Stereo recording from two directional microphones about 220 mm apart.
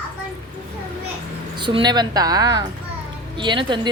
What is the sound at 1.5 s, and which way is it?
A woman's voice, 20° right (ahead or behind).